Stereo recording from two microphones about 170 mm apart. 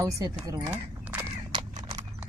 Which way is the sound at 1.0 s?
10° right (ahead or behind).